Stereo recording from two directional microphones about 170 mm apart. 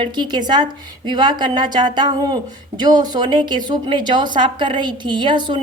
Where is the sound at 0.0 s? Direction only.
25° right (ahead or behind).